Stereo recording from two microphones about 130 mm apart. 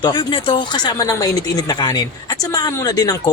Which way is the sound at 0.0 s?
35° left (ahead or behind).